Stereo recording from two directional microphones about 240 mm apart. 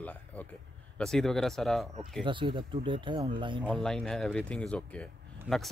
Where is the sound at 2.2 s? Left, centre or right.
Centre.